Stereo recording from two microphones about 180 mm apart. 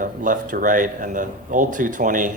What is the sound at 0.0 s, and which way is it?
Speech, 45° right (ahead or behind).